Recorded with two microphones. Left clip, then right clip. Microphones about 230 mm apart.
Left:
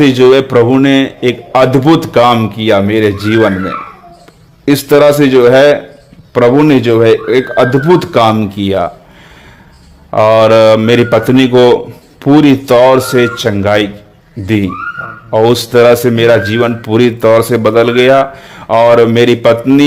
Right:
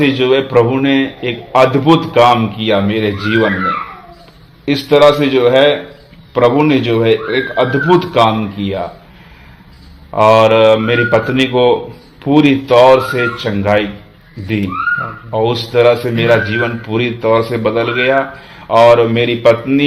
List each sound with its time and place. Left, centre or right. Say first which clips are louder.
0.0 s a man's voice: left 6 dB; left
4.6 s a man's voice: left 2 dB; left
10.1 s a man's voice: left 2 dB; left